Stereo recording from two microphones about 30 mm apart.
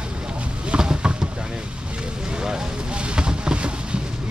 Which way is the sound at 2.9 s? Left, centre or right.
Right.